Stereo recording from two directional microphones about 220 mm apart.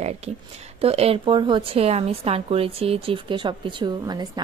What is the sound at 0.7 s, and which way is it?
A woman's voice, 25° right (ahead or behind).